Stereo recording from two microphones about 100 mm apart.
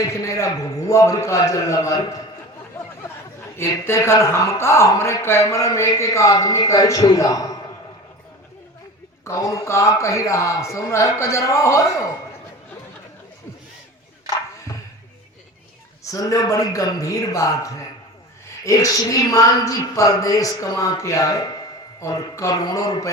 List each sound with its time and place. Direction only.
0.0 s a man's voice: 35° left (ahead or behind)
3.6 s a man's voice: 25° left (ahead or behind)
9.2 s a man's voice: 30° left (ahead or behind)
16.0 s a man's voice: 35° left (ahead or behind)